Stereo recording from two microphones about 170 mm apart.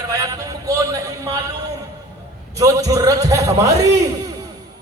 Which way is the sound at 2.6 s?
20° right (ahead or behind).